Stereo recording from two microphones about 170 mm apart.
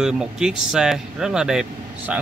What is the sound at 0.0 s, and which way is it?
A man's voice, 5° right (ahead or behind).